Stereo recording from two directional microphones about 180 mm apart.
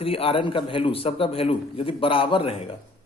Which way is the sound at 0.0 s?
30° left (ahead or behind).